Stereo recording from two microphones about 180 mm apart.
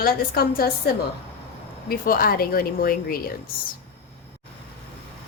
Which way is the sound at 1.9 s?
55° left (ahead or behind).